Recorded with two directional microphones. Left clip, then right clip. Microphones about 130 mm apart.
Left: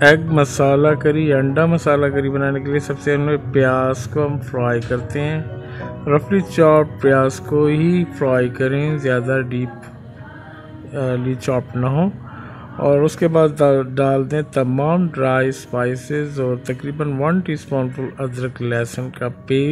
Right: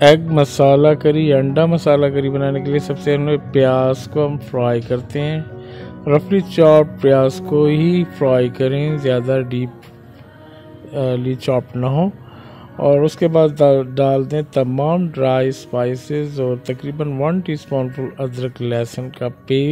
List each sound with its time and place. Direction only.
0.4 s speech: 55° right (ahead or behind)
11.0 s speech: 55° right (ahead or behind)